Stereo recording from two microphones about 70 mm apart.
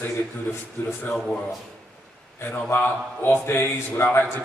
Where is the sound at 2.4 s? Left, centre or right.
Left.